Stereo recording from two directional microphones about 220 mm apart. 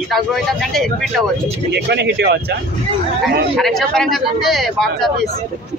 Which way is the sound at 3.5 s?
Centre (ahead or behind).